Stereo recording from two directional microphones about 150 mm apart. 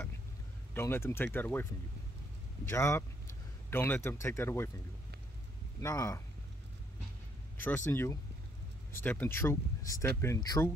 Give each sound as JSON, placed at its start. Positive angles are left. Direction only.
{"t": 0.7, "sound": "speech", "side_deg": 15}
{"t": 2.7, "sound": "speech", "side_deg": 15}
{"t": 5.8, "sound": "speech", "side_deg": 20}
{"t": 7.5, "sound": "speech", "side_deg": 15}